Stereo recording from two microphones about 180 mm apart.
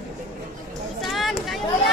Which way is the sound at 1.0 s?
Centre (ahead or behind).